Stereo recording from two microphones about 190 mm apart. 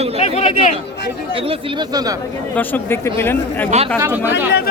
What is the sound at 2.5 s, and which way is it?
Speech, 10° left (ahead or behind).